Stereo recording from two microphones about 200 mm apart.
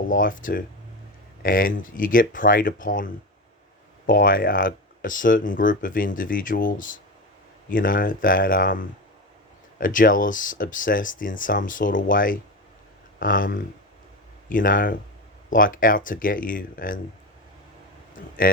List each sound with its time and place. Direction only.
0.1 s speech: 40° left (ahead or behind)
18.5 s speech: 45° left (ahead or behind)